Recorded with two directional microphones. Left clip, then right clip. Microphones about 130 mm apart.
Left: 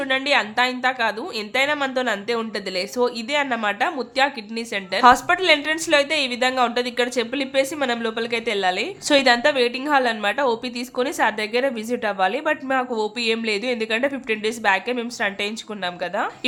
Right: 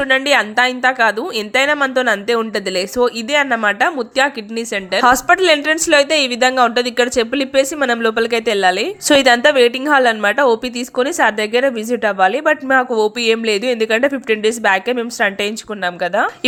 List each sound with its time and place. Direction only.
0.0 s speech: 45° right (ahead or behind)